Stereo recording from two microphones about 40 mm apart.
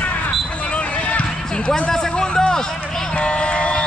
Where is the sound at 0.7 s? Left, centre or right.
Left.